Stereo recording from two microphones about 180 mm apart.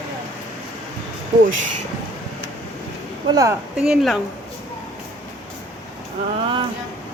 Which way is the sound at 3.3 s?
20° right (ahead or behind).